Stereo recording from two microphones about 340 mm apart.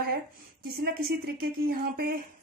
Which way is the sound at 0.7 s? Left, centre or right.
Right.